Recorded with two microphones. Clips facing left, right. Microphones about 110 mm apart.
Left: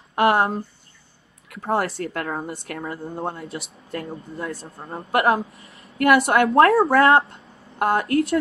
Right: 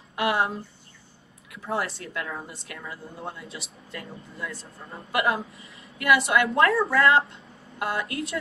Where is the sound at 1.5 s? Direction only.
60° left (ahead or behind).